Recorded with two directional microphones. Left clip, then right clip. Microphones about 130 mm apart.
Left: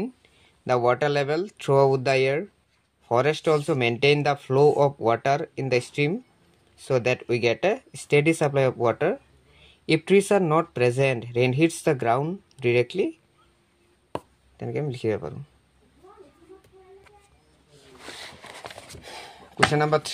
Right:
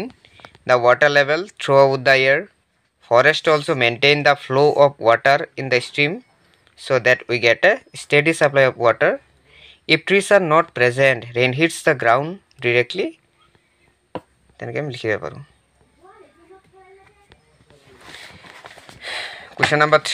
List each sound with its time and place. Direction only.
0.7 s speech: 35° left (ahead or behind)
14.6 s speech: 35° left (ahead or behind)
19.0 s a sound: 25° left (ahead or behind)
19.7 s speech: 25° left (ahead or behind)